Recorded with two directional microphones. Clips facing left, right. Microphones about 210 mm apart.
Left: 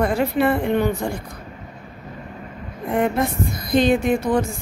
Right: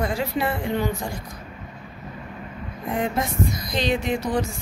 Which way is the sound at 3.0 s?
55° left (ahead or behind).